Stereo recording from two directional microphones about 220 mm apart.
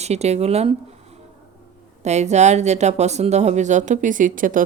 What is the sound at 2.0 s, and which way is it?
Speech, 30° right (ahead or behind).